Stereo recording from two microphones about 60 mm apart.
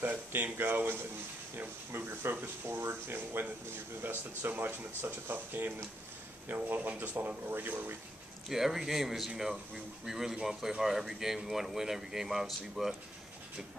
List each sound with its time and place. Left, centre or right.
0.0 s speech: right
8.5 s speech: centre